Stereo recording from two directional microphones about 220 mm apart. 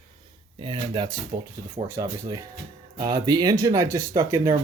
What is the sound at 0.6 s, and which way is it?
Speech, 25° right (ahead or behind).